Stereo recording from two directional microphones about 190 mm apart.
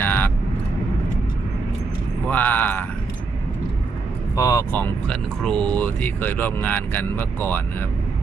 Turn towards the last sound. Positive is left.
turn(degrees=10)  # may be behind; listen again after turning